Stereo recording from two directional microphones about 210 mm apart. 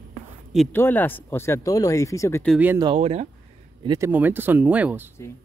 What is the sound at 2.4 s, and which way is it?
Speech, 5° right (ahead or behind).